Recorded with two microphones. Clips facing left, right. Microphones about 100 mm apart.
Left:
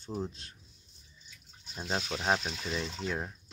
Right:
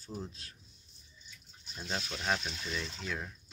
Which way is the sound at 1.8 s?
35° left (ahead or behind).